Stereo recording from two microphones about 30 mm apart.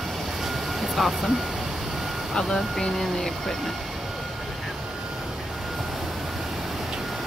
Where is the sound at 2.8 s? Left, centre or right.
Centre.